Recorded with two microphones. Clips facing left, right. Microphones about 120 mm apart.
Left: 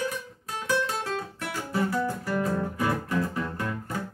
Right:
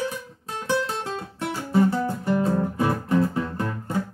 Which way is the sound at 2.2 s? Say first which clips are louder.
Right 5 dB; 25° right (ahead or behind).